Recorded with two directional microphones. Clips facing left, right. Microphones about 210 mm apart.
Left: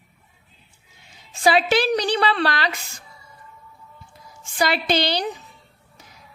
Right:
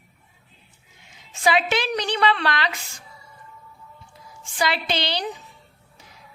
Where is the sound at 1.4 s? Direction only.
35° left (ahead or behind).